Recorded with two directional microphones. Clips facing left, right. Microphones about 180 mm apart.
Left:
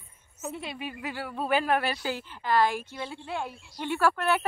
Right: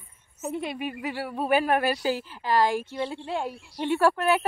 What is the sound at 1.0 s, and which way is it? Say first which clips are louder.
A woman's voice: right 2 dB; 10° right (ahead or behind).